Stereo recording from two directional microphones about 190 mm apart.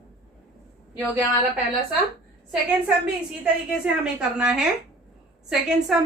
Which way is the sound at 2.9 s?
5° right (ahead or behind).